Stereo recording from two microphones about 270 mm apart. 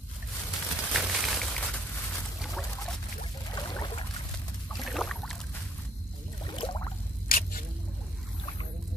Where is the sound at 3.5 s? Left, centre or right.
Centre.